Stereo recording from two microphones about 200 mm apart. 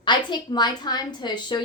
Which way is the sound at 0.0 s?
20° left (ahead or behind).